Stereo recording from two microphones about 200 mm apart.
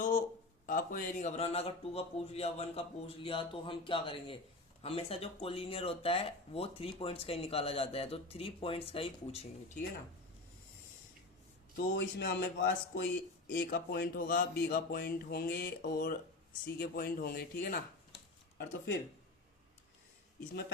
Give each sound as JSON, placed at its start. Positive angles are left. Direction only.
{"t": 0.6, "sound": "speech", "side_deg": 45}
{"t": 11.8, "sound": "speech", "side_deg": 55}
{"t": 18.5, "sound": "speech", "side_deg": 60}
{"t": 20.5, "sound": "speech", "side_deg": 55}